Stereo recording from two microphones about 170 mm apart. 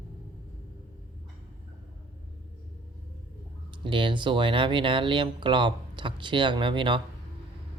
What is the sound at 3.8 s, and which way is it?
Speech, 30° right (ahead or behind).